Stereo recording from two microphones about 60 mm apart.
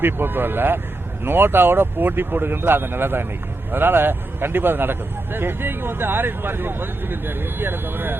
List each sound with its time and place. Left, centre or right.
0.0 s speech: right